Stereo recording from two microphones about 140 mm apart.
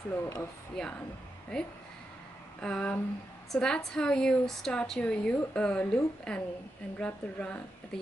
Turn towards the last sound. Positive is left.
turn(degrees=10)  # may be behind; listen again after turning